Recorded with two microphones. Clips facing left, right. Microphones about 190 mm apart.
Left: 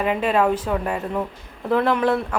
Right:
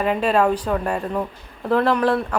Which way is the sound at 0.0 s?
10° left (ahead or behind).